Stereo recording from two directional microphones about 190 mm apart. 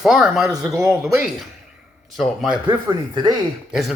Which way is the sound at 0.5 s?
20° right (ahead or behind).